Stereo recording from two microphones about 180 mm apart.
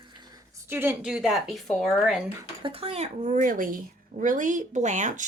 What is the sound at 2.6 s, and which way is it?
Speech, 30° right (ahead or behind).